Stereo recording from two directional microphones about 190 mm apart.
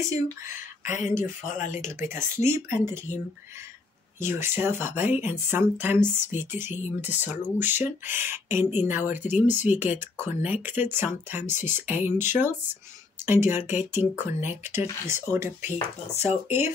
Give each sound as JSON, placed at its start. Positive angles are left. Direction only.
{"t": 0.0, "sound": "speech", "side_deg": -15}
{"t": 0.6, "sound": "speech", "side_deg": 40}
{"t": 2.0, "sound": "speech", "side_deg": -15}
{"t": 4.2, "sound": "speech", "side_deg": -10}
{"t": 16.1, "sound": "speech", "side_deg": 35}